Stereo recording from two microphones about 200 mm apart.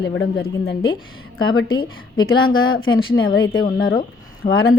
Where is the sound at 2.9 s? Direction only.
90° left.